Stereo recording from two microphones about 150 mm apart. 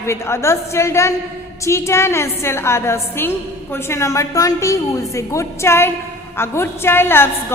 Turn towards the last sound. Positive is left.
turn(degrees=15)  # may be behind; listen again after turning